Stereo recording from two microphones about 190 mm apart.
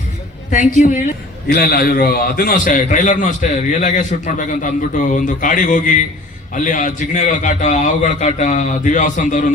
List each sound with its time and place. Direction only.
0.5 s a man's voice: 40° left (ahead or behind)